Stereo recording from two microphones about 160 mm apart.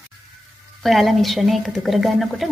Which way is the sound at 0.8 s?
Centre (ahead or behind).